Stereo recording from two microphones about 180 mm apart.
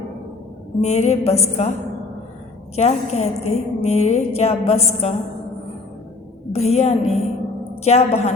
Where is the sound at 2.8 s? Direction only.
35° left (ahead or behind).